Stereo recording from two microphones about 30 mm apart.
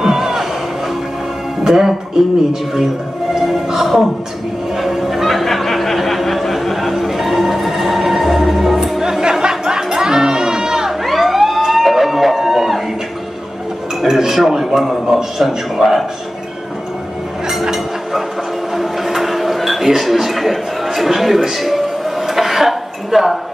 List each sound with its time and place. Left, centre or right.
0.0 s music: centre
1.6 s speech: centre
3.3 s music: centre
4.7 s a sound: centre
9.2 s music: right
10.9 s emergency vehicle: centre
14.0 s a man's voice: centre
17.5 s a sound: centre